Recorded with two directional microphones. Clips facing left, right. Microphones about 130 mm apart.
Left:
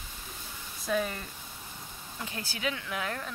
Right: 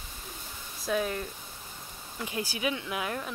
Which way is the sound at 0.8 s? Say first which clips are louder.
Right 1 dB; centre (ahead or behind).